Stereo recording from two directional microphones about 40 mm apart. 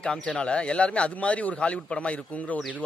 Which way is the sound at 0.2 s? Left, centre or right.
Left.